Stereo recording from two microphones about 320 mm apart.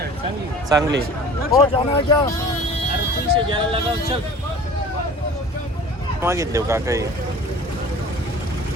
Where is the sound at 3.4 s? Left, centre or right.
Centre.